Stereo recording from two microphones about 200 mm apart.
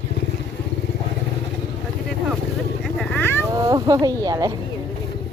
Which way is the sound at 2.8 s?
5° left (ahead or behind).